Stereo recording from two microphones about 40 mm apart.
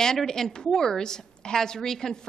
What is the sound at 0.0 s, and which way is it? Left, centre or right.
A woman's voice, centre.